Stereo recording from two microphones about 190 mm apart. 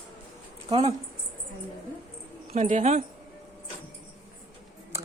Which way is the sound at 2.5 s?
40° right (ahead or behind).